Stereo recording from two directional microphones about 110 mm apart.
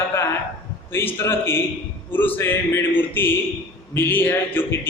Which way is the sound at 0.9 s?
20° left (ahead or behind).